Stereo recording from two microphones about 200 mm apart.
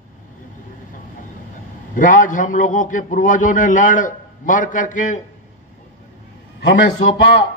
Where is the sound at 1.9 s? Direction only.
40° left (ahead or behind).